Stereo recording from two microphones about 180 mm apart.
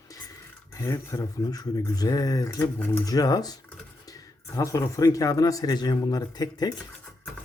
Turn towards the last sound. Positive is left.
turn(degrees=20)  # may be behind; listen again after turning